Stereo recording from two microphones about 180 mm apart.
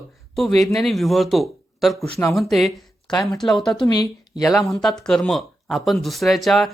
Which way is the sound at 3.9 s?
20° left (ahead or behind).